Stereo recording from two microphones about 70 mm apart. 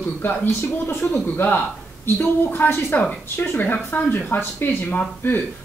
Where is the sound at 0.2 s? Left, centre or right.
Left.